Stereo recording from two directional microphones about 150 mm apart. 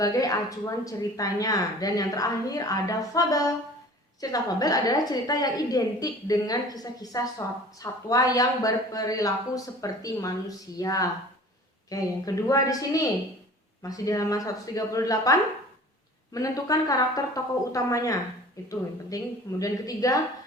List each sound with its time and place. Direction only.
0.0 s a woman's voice: 25° left (ahead or behind)